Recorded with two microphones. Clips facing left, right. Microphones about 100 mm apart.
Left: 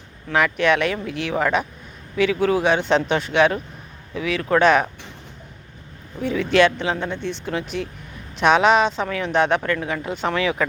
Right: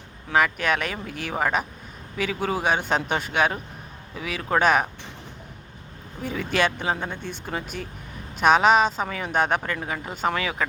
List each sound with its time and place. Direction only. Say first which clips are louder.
0.3 s speech: left 3 dB; 5° right (ahead or behind)
6.2 s speech: left 7 dB; 5° right (ahead or behind)